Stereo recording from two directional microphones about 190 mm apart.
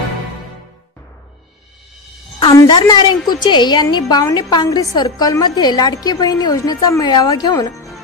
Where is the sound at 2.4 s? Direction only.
25° left (ahead or behind).